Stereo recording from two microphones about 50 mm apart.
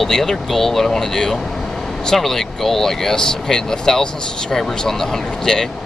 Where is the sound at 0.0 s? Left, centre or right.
Centre.